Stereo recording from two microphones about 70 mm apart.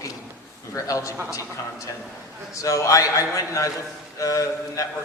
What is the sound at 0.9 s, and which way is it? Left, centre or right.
Speech, left.